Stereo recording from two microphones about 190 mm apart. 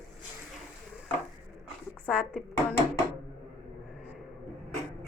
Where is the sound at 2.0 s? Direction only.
5° right (ahead or behind).